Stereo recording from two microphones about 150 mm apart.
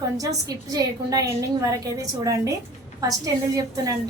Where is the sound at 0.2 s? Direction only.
25° right (ahead or behind).